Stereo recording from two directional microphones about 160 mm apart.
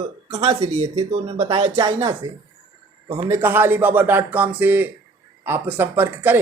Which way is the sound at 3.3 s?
15° right (ahead or behind).